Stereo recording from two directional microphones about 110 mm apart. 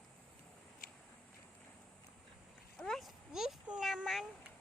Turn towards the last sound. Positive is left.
turn(degrees=-5)  # may be behind; listen again after turning